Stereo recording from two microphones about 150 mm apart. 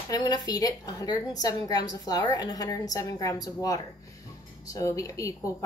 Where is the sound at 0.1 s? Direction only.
25° left (ahead or behind).